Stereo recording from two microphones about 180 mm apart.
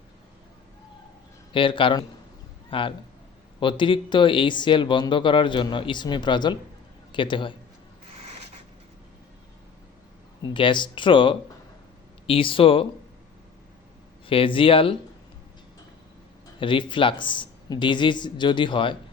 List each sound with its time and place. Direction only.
1.5 s a man's voice: 30° left (ahead or behind)
8.1 s a sound: 35° right (ahead or behind)
10.4 s speech: 25° left (ahead or behind)
14.3 s speech: 30° left (ahead or behind)
16.6 s speech: 30° left (ahead or behind)